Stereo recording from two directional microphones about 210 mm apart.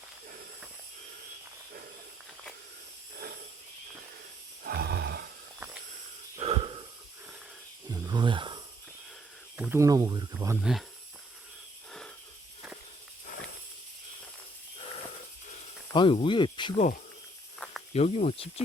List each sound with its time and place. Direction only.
4.6 s roar: 50° right (ahead or behind)
6.4 s wheeze: 25° right (ahead or behind)
7.9 s a sound: 20° right (ahead or behind)
9.6 s speech: 10° right (ahead or behind)
11.9 s a sound: 5° left (ahead or behind)
15.9 s speech: 25° left (ahead or behind)
17.6 s snake: 5° left (ahead or behind)
17.9 s speech: 30° left (ahead or behind)